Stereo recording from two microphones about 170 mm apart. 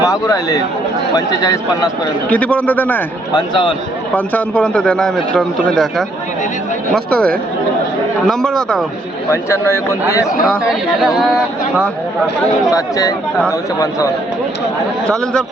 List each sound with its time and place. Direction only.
0.0 s speech: 20° left (ahead or behind)
2.3 s a man's voice: 10° left (ahead or behind)
3.3 s speech: 30° left (ahead or behind)
4.1 s a man's voice: 10° left (ahead or behind)
8.3 s a man's voice: 5° left (ahead or behind)
9.3 s a man's voice: 15° left (ahead or behind)
10.7 s a man's voice: centre (ahead or behind)
12.7 s speech: 20° left (ahead or behind)
15.0 s a man's voice: 5° left (ahead or behind)